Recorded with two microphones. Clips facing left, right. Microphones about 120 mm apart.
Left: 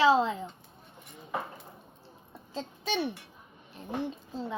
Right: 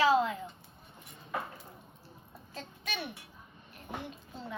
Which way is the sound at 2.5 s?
30° left (ahead or behind).